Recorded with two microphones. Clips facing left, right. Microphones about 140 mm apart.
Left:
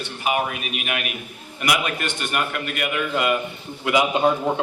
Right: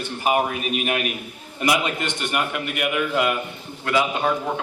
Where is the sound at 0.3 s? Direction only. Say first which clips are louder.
Right 3 dB; 40° right (ahead or behind).